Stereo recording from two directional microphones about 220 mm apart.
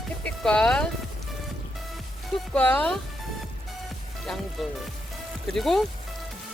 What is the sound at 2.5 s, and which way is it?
Speech, 5° left (ahead or behind).